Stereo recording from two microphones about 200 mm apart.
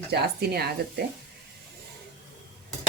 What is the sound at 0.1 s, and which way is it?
Speech, 50° right (ahead or behind).